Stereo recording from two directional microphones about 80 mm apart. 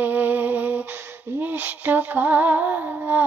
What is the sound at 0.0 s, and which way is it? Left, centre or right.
Music, right.